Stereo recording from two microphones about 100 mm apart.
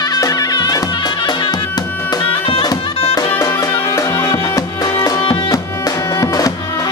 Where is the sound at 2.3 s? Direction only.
65° left (ahead or behind).